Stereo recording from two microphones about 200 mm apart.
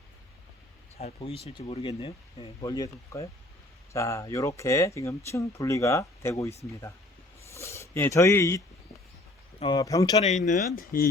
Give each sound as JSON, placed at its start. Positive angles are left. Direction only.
{"t": 0.9, "sound": "speech", "side_deg": 30}
{"t": 7.5, "sound": "speech", "side_deg": 15}
{"t": 10.2, "sound": "speech", "side_deg": 35}